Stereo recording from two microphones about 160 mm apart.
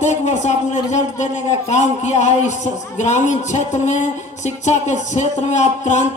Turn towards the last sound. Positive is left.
turn(degrees=45)  # may be behind; listen again after turning